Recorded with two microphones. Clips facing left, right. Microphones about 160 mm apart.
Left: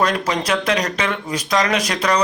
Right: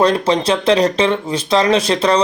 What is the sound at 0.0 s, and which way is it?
Speech, 30° right (ahead or behind).